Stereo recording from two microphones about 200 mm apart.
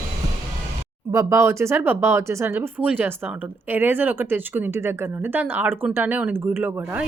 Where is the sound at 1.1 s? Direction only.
15° right (ahead or behind).